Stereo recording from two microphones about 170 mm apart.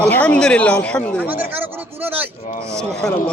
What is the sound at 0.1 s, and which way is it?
Speech, 5° left (ahead or behind).